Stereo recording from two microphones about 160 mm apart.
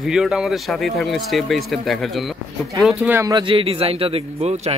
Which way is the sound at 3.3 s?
35° right (ahead or behind).